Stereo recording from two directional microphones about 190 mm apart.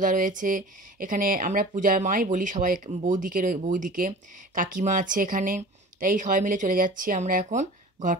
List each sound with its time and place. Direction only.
0.0 s speech: 45° right (ahead or behind)